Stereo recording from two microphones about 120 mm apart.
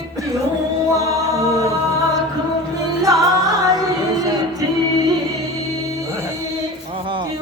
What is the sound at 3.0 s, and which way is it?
Music, 30° right (ahead or behind).